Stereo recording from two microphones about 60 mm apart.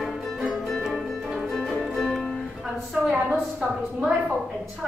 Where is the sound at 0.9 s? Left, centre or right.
Centre.